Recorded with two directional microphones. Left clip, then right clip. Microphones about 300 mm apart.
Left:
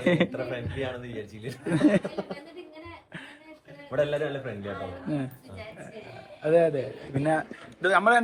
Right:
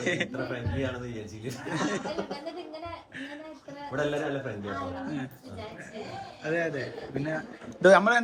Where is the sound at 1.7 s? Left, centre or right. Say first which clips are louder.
Left 8 dB; centre.